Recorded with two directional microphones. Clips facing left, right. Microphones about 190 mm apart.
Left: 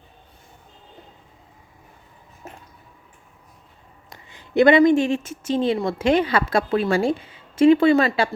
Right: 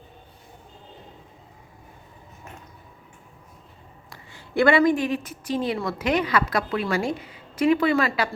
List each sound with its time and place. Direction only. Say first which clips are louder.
4.1 s a woman's voice: left 5 dB; 20° left (ahead or behind)